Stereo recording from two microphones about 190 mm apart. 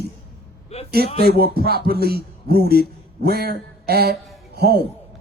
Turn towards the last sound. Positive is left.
turn(degrees=-60)  # may be behind; listen again after turning